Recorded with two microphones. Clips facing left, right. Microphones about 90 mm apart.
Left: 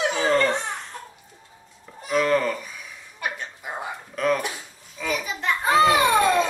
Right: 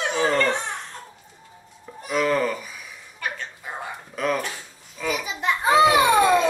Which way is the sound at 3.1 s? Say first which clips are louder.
Even; 15° left (ahead or behind).